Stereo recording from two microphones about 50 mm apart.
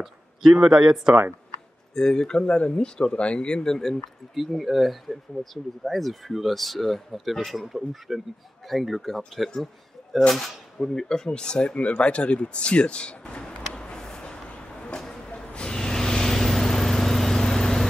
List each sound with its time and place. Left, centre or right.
0.0 s speech: centre
2.0 s speech: centre
15.0 s train: centre
15.3 s vehicle: left